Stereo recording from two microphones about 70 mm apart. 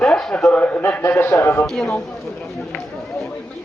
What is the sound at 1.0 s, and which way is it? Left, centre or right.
Speech, left.